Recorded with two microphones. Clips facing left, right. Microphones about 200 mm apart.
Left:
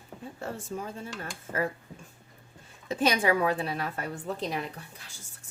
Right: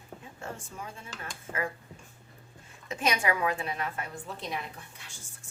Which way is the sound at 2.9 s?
30° left (ahead or behind).